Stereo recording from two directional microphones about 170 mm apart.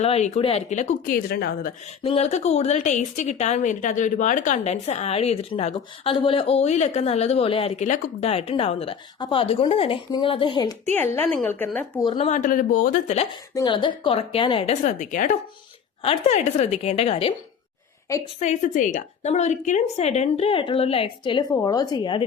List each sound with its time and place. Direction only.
0.0 s speech: 40° left (ahead or behind); by 1.7 s 65° left (ahead or behind)
2.0 s a woman's voice: 35° left (ahead or behind)
11.1 s speech: 10° left (ahead or behind)
12.0 s speech: 30° left (ahead or behind)
12.3 s speech: 50° left (ahead or behind)
13.5 s a woman's voice: 25° left (ahead or behind)
18.3 s a woman's voice: 45° left (ahead or behind); by 22.3 s 25° left (ahead or behind)